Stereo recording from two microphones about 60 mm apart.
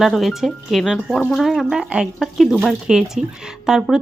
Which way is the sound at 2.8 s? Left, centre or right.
Centre.